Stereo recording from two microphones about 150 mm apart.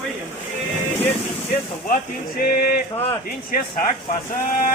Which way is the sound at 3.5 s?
75° left (ahead or behind).